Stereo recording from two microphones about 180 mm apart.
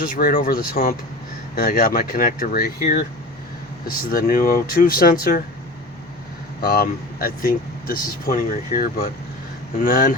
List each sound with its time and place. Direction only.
0.2 s speech: 50° left (ahead or behind)
4.1 s speech: 50° left (ahead or behind)
6.6 s speech: 50° left (ahead or behind)